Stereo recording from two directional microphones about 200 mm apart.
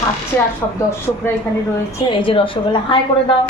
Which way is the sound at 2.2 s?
25° left (ahead or behind).